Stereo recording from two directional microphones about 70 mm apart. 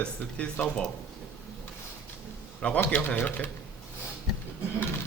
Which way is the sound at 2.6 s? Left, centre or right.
Centre.